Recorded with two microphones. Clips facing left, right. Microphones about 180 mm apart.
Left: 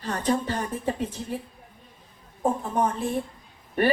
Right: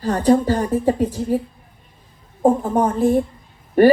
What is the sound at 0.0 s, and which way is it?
A woman's voice, 35° right (ahead or behind).